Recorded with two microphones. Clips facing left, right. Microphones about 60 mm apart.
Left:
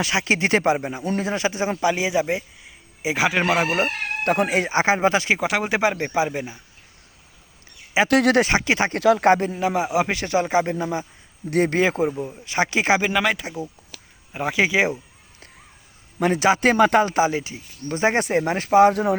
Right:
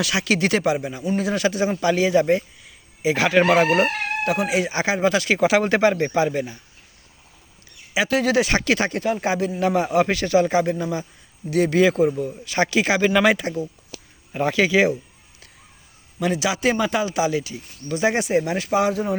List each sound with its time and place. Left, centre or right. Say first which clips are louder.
0.0 s speech: even; left
1.8 s a man's voice: right 3 dB; centre
4.2 s speech: left 2 dB; left
4.7 s speech: left 2 dB; left
5.4 s speech: right 4 dB; centre
8.0 s speech: left 3 dB; left
8.4 s speech: even; left
9.0 s speech: left 6 dB; left
9.6 s speech: right 2 dB; centre
10.1 s speech: right 3 dB; left
11.5 s speech: right 2 dB; left
13.1 s speech: right 4 dB; centre
14.5 s speech: right 1 dB; centre
16.2 s speech: left 3 dB; left